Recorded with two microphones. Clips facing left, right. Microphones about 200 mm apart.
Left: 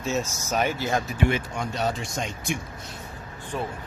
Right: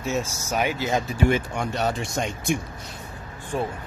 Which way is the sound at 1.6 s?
65° right (ahead or behind).